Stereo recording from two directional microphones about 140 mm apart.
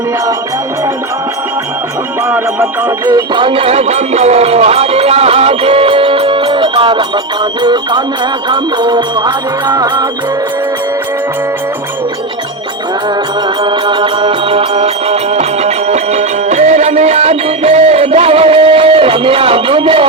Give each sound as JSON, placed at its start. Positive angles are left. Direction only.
{"t": 3.1, "sound": "music", "side_deg": -30}
{"t": 13.7, "sound": "music", "side_deg": -35}